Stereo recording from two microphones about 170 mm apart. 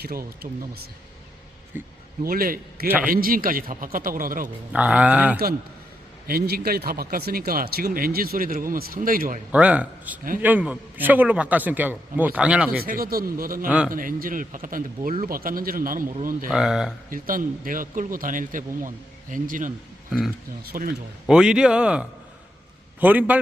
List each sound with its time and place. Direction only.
0.0 s speech: 65° right (ahead or behind)
1.7 s a man's voice: 10° right (ahead or behind)
2.2 s speech: 60° right (ahead or behind)
2.8 s a man's voice: 10° right (ahead or behind)
3.1 s speech: 55° right (ahead or behind)
4.7 s a man's voice: 5° right (ahead or behind)
6.2 s speech: 65° right (ahead or behind)
9.5 s a man's voice: 10° right (ahead or behind)
12.8 s speech: 60° right (ahead or behind)
13.7 s speech: 5° right (ahead or behind)
13.9 s speech: 55° right (ahead or behind)
16.5 s speech: 5° right (ahead or behind)
17.1 s speech: 55° right (ahead or behind)
21.2 s a man's voice: 5° right (ahead or behind)